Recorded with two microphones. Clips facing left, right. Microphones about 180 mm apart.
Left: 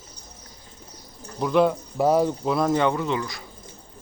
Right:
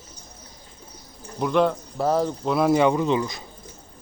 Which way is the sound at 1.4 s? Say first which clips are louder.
Left 1 dB; 5° left (ahead or behind).